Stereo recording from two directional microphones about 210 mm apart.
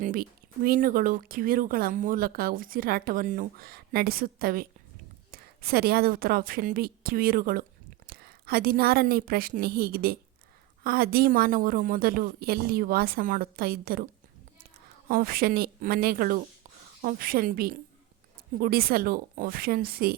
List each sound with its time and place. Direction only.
0.0 s a woman's voice: 45° right (ahead or behind)
15.0 s speech: 45° right (ahead or behind)